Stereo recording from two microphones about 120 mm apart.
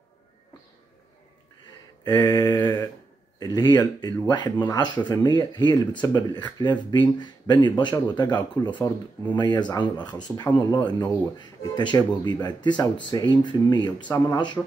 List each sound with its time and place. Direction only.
2.1 s mantra: 35° left (ahead or behind)
3.3 s speech: 35° left (ahead or behind)